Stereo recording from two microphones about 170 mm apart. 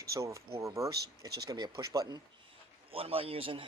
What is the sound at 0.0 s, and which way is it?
Speech, 20° right (ahead or behind).